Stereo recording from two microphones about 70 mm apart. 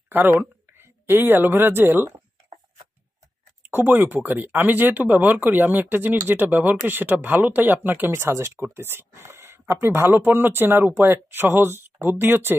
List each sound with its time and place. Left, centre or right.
0.1 s speech: right
3.6 s speech: right